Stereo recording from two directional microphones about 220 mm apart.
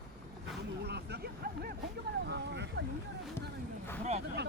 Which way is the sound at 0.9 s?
50° right (ahead or behind).